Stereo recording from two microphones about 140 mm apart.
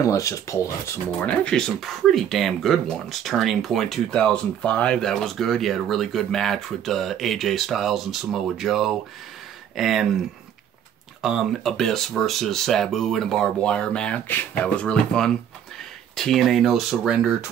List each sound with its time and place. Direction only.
0.0 s speech: 20° left (ahead or behind)
1.2 s speech: 5° left (ahead or behind)
11.2 s speech: centre (ahead or behind)